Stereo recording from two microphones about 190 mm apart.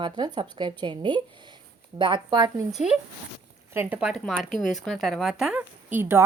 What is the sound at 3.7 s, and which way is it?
A woman's voice, 10° right (ahead or behind).